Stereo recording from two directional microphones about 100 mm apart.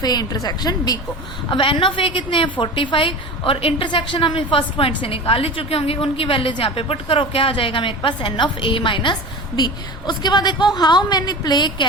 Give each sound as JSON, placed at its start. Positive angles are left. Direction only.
{"t": 0.0, "sound": "a woman's voice", "side_deg": 40}
{"t": 1.5, "sound": "a woman's voice", "side_deg": 55}